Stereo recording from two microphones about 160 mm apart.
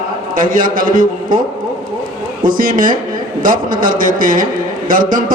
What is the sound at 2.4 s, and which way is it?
A man's voice, 60° right (ahead or behind).